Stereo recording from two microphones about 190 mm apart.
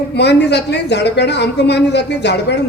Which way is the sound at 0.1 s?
65° left (ahead or behind).